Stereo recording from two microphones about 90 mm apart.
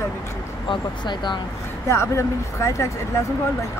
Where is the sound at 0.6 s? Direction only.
55° left (ahead or behind).